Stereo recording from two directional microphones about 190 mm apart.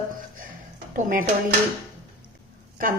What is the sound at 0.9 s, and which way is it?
Speech, 45° right (ahead or behind).